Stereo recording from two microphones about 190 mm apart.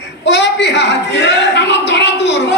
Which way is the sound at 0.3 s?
65° left (ahead or behind).